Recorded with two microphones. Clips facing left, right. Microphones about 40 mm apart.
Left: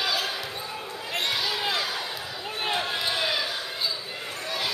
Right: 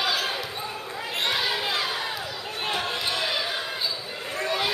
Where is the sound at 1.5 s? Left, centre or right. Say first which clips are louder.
Right 1 dB; centre.